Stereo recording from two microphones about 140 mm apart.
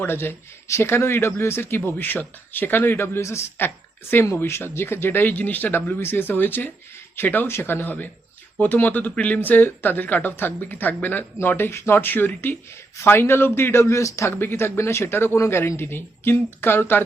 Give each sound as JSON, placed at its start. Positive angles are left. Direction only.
{"t": 0.0, "sound": "speech", "side_deg": 15}